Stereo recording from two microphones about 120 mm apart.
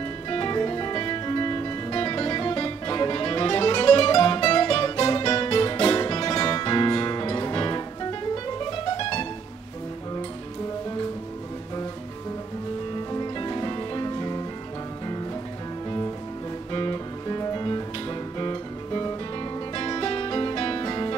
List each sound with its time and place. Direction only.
0.3 s music: 35° left (ahead or behind)
13.1 s music: 30° left (ahead or behind)
16.7 s music: 35° left (ahead or behind)